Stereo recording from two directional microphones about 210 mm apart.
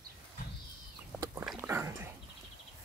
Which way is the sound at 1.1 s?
10° right (ahead or behind).